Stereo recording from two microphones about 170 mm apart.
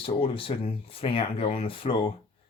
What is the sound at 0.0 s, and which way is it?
Speech, 35° left (ahead or behind).